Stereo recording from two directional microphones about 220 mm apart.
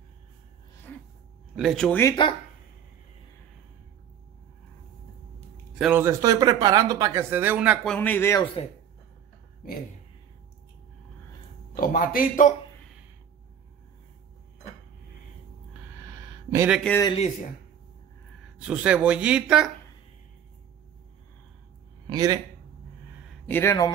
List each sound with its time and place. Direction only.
0.9 s a sound: 10° left (ahead or behind)
1.5 s speech: centre (ahead or behind); by 2.3 s 15° left (ahead or behind)
5.8 s speech: 10° right (ahead or behind); by 8.5 s 10° left (ahead or behind)
11.7 s a man's voice: 40° left (ahead or behind)
16.0 s a sound: 15° right (ahead or behind)
16.8 s a man's voice: 10° left (ahead or behind)
18.6 s speech: 5° right (ahead or behind)
22.1 s speech: 20° right (ahead or behind)
23.5 s a man's voice: 10° left (ahead or behind)